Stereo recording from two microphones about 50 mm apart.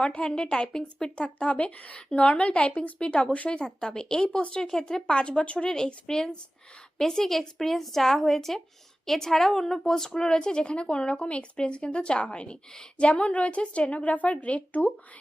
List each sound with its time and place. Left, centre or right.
0.0 s a woman's voice: left
3.6 s a woman's voice: centre